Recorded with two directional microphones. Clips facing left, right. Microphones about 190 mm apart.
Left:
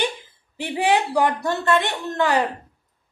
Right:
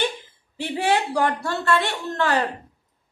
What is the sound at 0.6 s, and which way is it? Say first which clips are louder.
Speech: left 2 dB; 15° left (ahead or behind).